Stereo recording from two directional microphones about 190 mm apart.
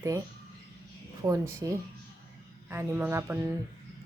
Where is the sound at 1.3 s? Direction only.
15° right (ahead or behind).